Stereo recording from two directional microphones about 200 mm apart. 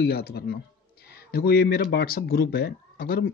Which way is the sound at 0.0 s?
50° left (ahead or behind).